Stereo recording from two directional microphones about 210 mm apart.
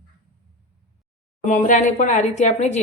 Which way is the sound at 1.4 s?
35° left (ahead or behind).